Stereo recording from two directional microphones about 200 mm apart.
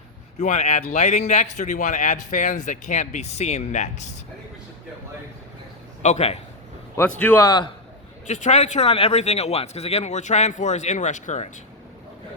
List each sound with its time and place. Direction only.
0.3 s speech: 35° left (ahead or behind)
6.0 s a man's voice: 35° left (ahead or behind)
6.9 s a man's voice: 10° left (ahead or behind)
8.3 s speech: 35° left (ahead or behind)